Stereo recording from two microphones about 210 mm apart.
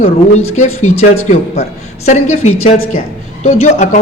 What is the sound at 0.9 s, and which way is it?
Speech, 30° left (ahead or behind).